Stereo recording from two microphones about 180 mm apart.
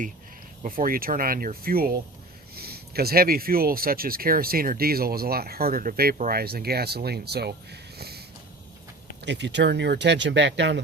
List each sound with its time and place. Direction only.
0.6 s speech: 50° right (ahead or behind)
9.2 s speech: 75° right (ahead or behind)